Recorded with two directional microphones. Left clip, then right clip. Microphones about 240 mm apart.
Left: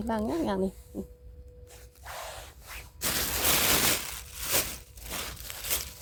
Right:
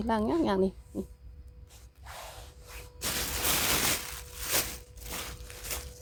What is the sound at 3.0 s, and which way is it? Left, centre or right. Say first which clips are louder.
Crushing: left 3 dB; left.